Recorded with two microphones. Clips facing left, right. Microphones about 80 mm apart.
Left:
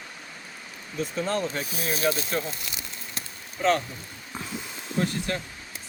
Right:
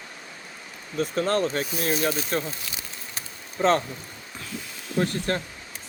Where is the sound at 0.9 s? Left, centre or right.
Right.